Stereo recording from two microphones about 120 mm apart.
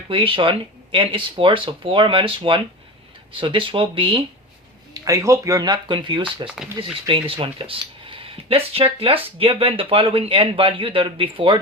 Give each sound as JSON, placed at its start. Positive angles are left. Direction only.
{"t": 0.1, "sound": "speech", "side_deg": -45}
{"t": 5.0, "sound": "speech", "side_deg": -25}